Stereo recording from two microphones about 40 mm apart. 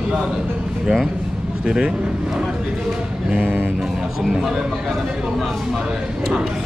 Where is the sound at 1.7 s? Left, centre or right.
Right.